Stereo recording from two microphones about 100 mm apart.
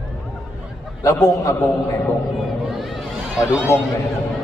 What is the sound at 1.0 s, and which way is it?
Speech, 30° left (ahead or behind).